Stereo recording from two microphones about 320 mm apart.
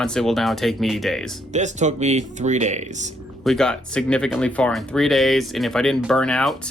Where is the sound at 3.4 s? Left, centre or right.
Centre.